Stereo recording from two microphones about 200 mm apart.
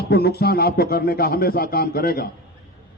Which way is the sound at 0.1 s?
50° left (ahead or behind).